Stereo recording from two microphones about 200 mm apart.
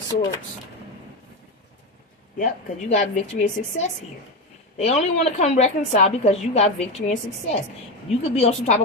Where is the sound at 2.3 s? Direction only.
40° left (ahead or behind).